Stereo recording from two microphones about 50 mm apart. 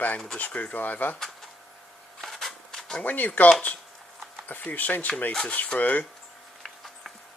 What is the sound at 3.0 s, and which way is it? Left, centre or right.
Speech, left.